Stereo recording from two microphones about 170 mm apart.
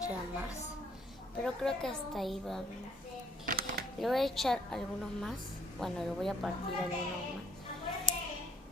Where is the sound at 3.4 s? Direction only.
65° right (ahead or behind).